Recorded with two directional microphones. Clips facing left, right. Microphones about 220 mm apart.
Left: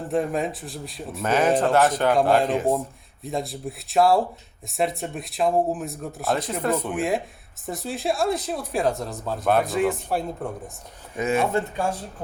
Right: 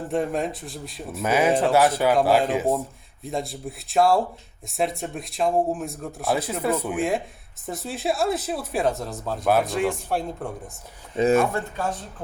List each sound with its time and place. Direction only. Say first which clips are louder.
0.1 s speech: left 1 dB; centre (ahead or behind)
11.2 s speech: right 6 dB; 25° right (ahead or behind)
11.5 s speech: left 3 dB; 15° left (ahead or behind)